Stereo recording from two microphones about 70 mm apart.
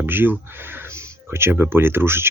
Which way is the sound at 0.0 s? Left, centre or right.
Right.